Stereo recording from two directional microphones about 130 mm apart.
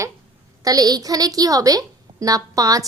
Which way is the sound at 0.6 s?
30° right (ahead or behind).